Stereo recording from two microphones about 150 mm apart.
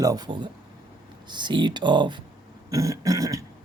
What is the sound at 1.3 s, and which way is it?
Speech, 30° right (ahead or behind).